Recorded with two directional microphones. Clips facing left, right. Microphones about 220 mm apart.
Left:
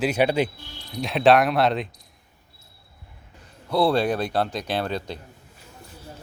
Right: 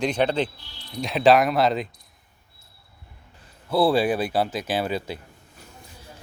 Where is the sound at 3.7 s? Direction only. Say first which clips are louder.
Right 1 dB; 5° right (ahead or behind).